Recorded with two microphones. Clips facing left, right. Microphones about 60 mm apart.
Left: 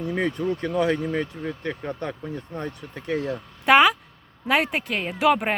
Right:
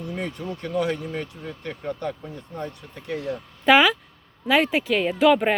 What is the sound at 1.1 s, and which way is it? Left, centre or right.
Speech, left.